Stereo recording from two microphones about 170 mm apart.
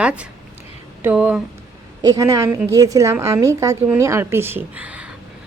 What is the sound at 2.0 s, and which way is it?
A woman's voice, 20° right (ahead or behind).